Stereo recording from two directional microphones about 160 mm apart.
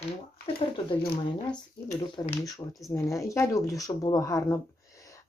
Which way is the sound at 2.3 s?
20° left (ahead or behind).